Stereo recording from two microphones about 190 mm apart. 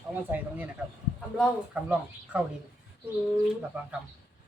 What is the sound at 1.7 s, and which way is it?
Speech, 5° right (ahead or behind).